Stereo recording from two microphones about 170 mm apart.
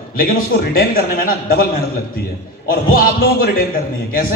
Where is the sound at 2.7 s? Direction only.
60° left (ahead or behind).